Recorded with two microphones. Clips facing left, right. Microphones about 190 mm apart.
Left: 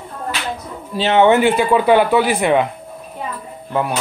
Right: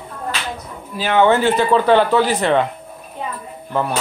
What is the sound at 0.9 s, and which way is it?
Speech, 25° left (ahead or behind).